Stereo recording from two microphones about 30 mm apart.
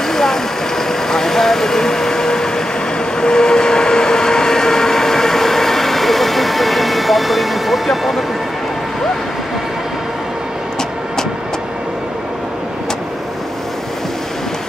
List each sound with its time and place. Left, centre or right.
0.1 s vehicle: centre
3.2 s train: left; by 8.2 s centre